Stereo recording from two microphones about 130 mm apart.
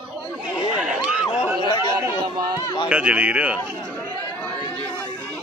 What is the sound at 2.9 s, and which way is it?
Speech, 10° right (ahead or behind).